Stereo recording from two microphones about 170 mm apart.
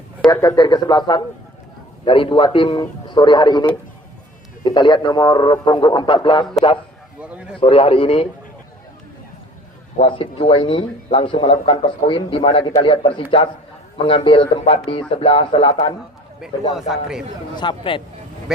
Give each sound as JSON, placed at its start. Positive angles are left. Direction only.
{"t": 0.4, "sound": "a man's voice", "side_deg": 25}
{"t": 7.2, "sound": "a man's voice", "side_deg": -5}
{"t": 7.6, "sound": "speech", "side_deg": 35}
{"t": 10.0, "sound": "a man's voice", "side_deg": 30}
{"t": 16.4, "sound": "a man's voice", "side_deg": 0}
{"t": 17.6, "sound": "a man's voice", "side_deg": 30}